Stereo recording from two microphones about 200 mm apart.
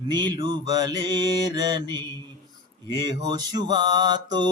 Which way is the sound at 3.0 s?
20° right (ahead or behind).